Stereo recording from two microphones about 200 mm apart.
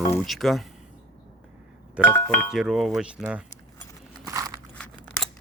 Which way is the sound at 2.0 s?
10° left (ahead or behind).